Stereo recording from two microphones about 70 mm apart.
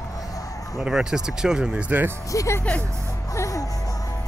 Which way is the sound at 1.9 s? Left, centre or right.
Right.